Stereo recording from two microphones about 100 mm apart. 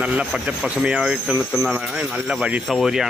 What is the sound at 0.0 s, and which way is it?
Speech, 10° right (ahead or behind).